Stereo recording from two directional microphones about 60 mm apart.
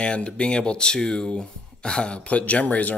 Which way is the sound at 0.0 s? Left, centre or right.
Centre.